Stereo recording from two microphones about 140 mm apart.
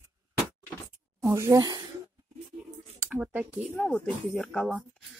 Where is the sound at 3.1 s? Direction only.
10° right (ahead or behind).